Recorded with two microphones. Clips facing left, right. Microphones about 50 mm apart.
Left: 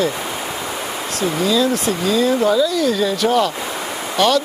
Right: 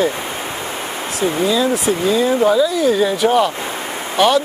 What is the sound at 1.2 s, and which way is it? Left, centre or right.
Speech, centre.